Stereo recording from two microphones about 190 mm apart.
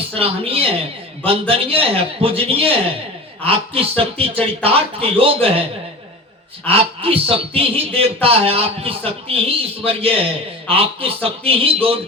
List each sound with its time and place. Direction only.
0.1 s speech: 30° right (ahead or behind)
6.7 s speech: 30° right (ahead or behind)